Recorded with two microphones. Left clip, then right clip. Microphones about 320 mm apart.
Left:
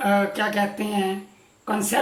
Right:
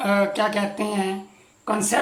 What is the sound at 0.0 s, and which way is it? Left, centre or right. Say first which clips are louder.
Speech: right 1 dB; centre.